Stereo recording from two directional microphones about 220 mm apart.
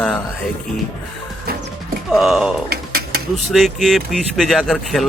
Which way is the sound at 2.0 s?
Centre (ahead or behind).